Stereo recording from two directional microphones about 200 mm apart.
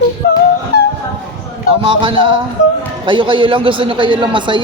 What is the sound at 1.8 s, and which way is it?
A man's voice, 25° right (ahead or behind).